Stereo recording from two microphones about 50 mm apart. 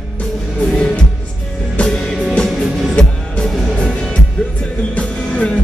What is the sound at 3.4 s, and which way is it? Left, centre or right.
Music, centre.